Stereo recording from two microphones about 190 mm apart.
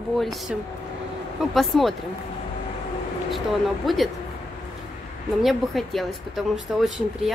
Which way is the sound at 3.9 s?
Centre (ahead or behind).